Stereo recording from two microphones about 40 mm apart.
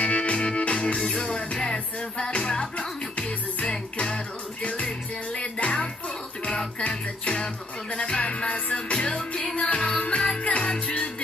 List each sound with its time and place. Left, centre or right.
0.0 s music: left
6.9 s music: left